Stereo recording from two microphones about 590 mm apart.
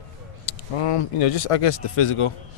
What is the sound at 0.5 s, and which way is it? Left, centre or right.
Speech, left.